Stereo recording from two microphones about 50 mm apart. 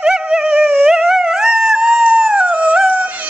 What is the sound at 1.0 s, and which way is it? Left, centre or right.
Dog, centre.